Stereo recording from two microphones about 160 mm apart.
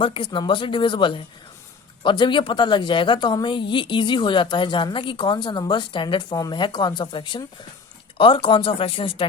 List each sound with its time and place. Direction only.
0.0 s a woman's voice: 30° left (ahead or behind)